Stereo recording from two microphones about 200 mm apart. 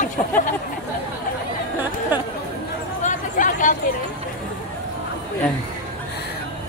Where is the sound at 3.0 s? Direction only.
40° left (ahead or behind).